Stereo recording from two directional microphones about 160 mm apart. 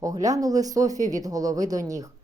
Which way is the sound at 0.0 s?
20° right (ahead or behind).